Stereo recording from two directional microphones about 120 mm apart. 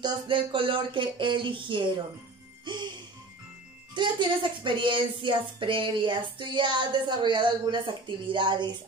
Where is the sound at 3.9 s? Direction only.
40° right (ahead or behind).